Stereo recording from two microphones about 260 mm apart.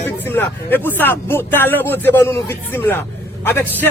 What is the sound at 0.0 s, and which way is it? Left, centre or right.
A man's voice, centre.